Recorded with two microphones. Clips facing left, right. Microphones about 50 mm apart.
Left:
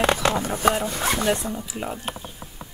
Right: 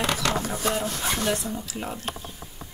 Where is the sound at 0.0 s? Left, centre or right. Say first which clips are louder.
Left 5 dB; left.